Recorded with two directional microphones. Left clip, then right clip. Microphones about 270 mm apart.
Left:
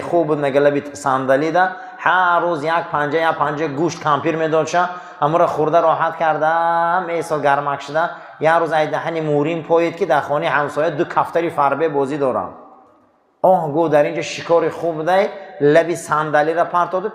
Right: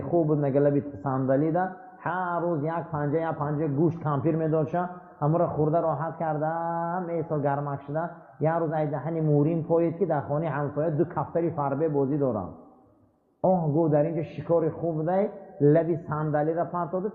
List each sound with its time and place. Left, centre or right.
0.0 s a man's voice: centre
13.9 s a man's voice: centre